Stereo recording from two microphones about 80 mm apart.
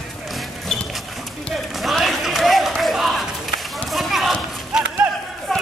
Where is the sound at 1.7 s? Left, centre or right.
Centre.